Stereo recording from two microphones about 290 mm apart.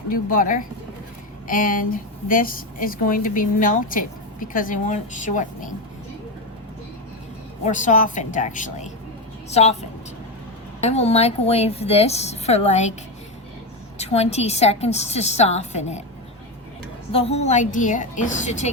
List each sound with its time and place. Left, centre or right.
0.1 s a woman's voice: left
7.6 s a woman's voice: left
10.8 s a woman's voice: left
14.0 s a woman's voice: left
17.1 s a woman's voice: centre